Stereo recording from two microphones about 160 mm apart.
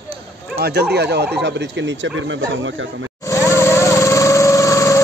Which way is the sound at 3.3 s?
15° left (ahead or behind).